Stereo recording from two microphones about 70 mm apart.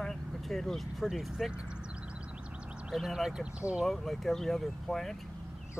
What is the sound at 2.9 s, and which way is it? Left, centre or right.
Speech, centre.